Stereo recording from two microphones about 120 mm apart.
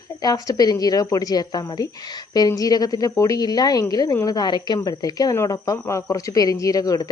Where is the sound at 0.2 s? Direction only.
35° left (ahead or behind).